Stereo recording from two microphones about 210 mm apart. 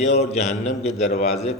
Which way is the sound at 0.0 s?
30° left (ahead or behind).